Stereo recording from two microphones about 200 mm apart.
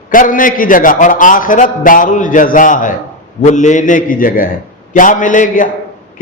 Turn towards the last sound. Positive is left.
turn(degrees=40)  # may be behind; listen again after turning